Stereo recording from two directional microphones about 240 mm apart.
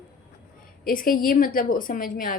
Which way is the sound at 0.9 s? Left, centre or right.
Left.